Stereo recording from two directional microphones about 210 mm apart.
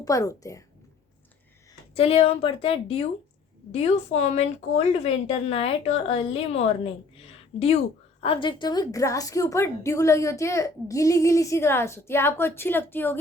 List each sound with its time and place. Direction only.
0.0 s a woman's voice: 15° left (ahead or behind)
2.0 s a woman's voice: 30° left (ahead or behind); by 13.1 s 10° left (ahead or behind)